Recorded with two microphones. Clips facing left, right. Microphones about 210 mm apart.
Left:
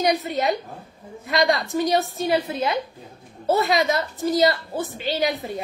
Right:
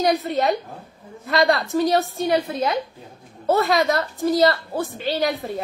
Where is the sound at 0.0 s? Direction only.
Centre (ahead or behind).